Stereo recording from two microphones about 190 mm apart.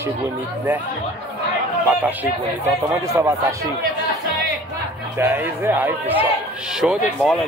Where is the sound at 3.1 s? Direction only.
15° right (ahead or behind).